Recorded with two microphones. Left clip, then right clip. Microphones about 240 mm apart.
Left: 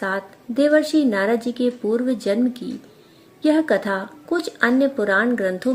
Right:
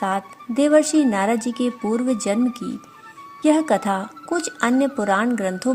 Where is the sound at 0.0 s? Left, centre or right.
Right.